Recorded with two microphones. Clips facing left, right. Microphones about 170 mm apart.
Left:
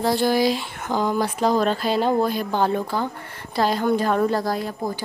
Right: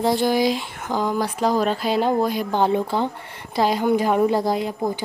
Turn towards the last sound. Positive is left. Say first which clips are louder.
# right 3 dB
turn(degrees=-20)  # may be behind; listen again after turning